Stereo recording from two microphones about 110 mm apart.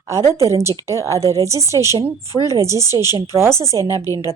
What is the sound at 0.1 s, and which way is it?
Speech, 30° right (ahead or behind).